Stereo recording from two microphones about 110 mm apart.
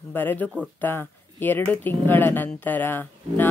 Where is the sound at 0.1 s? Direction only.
15° left (ahead or behind).